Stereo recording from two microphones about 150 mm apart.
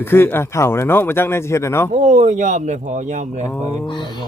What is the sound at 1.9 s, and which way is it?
Speech, 50° right (ahead or behind).